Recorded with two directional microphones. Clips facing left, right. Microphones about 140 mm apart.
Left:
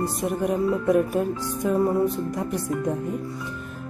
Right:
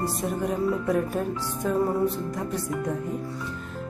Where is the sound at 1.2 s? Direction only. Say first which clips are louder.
Left 3 dB; 15° left (ahead or behind).